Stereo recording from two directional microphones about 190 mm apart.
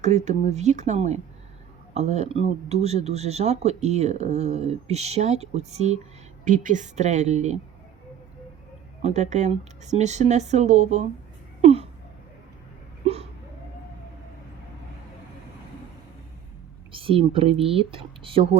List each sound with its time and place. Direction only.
0.0 s speech: 35° right (ahead or behind)
9.0 s speech: 35° right (ahead or behind)
11.6 s a sound: 30° right (ahead or behind)
16.9 s speech: 30° right (ahead or behind)